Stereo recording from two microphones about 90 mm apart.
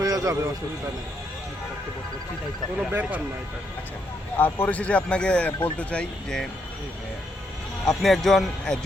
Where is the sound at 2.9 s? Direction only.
15° right (ahead or behind).